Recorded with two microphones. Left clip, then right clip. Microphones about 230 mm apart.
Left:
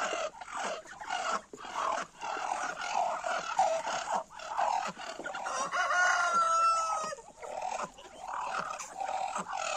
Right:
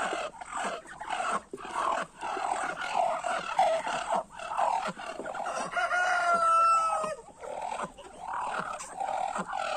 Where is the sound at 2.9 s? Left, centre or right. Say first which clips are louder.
Right 3 dB; right.